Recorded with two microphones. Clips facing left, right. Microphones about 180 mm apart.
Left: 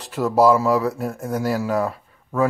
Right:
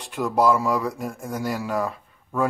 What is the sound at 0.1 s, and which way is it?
Speech, 5° left (ahead or behind).